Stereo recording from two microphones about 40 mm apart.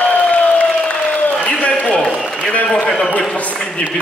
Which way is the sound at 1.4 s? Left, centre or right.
Left.